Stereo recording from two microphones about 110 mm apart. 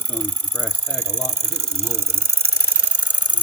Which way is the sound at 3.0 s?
15° left (ahead or behind).